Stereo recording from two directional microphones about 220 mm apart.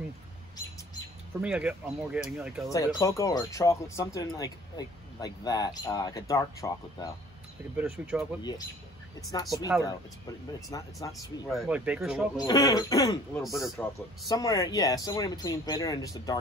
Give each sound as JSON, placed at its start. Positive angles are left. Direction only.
{"t": 1.4, "sound": "speech", "side_deg": -5}
{"t": 2.7, "sound": "speech", "side_deg": 15}
{"t": 7.7, "sound": "speech", "side_deg": -5}
{"t": 8.4, "sound": "speech", "side_deg": 20}
{"t": 10.7, "sound": "speech", "side_deg": 15}
{"t": 11.4, "sound": "speech", "side_deg": 0}
{"t": 12.4, "sound": "speech", "side_deg": 15}
{"t": 13.3, "sound": "speech", "side_deg": 0}
{"t": 14.3, "sound": "speech", "side_deg": 15}